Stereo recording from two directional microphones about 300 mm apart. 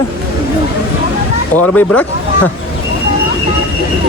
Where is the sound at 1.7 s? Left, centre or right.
Centre.